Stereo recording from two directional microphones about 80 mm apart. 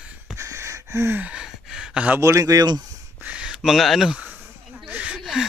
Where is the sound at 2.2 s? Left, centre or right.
Right.